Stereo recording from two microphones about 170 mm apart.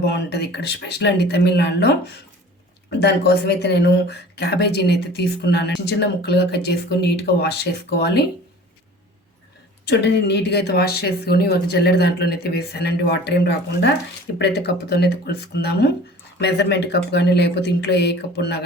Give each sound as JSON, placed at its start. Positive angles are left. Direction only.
{"t": 0.0, "sound": "speech", "side_deg": 75}
{"t": 3.0, "sound": "speech", "side_deg": 75}
{"t": 9.8, "sound": "speech", "side_deg": 90}